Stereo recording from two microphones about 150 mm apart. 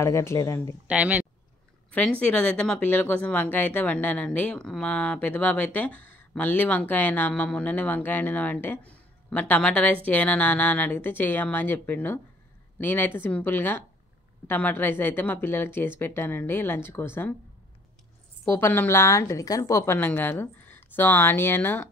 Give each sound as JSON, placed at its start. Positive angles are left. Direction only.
{"t": 0.0, "sound": "speech", "side_deg": 20}
{"t": 0.8, "sound": "speech", "side_deg": -10}
{"t": 1.9, "sound": "speech", "side_deg": 10}
{"t": 18.5, "sound": "speech", "side_deg": 15}